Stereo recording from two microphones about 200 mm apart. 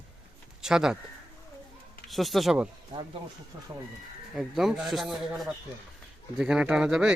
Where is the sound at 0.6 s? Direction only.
5° right (ahead or behind).